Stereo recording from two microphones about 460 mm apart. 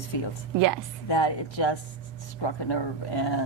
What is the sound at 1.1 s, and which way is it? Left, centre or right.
Speech, left.